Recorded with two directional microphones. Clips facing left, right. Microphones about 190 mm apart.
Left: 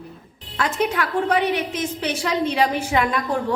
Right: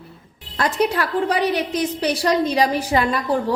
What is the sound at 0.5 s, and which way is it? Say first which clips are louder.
A woman's voice: right 2 dB; 35° right (ahead or behind).